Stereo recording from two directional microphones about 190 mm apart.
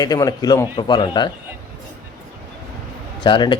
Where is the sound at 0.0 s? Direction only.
20° left (ahead or behind).